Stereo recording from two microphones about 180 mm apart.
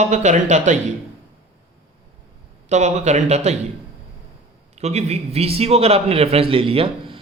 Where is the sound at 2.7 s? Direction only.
40° right (ahead or behind).